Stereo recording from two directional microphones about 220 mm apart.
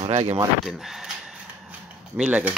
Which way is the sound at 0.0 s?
30° right (ahead or behind).